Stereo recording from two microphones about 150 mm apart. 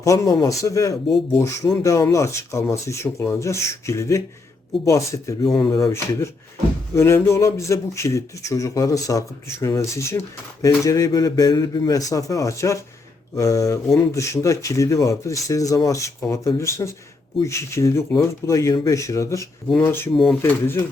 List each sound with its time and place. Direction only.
0.0 s speech: 20° left (ahead or behind)